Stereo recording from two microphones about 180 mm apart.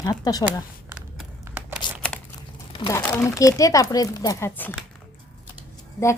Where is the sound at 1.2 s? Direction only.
10° right (ahead or behind).